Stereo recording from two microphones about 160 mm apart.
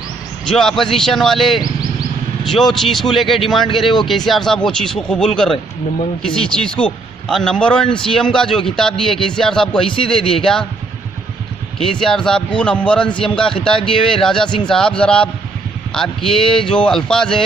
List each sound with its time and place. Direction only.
0.5 s a man's voice: 5° left (ahead or behind)
9.8 s a man's voice: 35° left (ahead or behind)
10.3 s a man's voice: 5° left (ahead or behind)
11.8 s a man's voice: 5° left (ahead or behind)
16.3 s a man's voice: 5° left (ahead or behind)